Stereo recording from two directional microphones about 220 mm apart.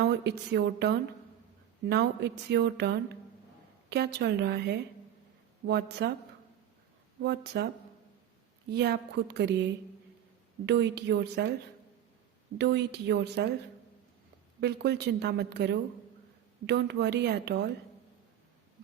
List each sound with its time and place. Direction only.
0.0 s speech: 50° right (ahead or behind)
7.2 s speech: 50° right (ahead or behind)
8.7 s speech: 50° right (ahead or behind)
10.7 s speech: 50° right (ahead or behind)
12.5 s speech: 50° right (ahead or behind)
14.6 s speech: 50° right (ahead or behind)